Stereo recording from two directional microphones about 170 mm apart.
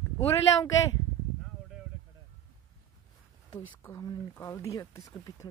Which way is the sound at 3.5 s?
20° left (ahead or behind).